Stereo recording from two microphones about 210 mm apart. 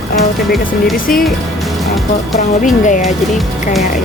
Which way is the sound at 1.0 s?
40° left (ahead or behind).